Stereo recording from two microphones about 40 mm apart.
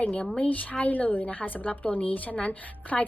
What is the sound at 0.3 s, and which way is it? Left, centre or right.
A woman's voice, left.